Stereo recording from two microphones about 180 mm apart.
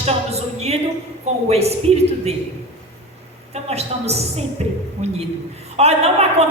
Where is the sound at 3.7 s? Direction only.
35° right (ahead or behind).